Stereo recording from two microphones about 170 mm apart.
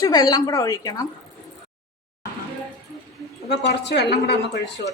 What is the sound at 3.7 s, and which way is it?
Speech, 85° left.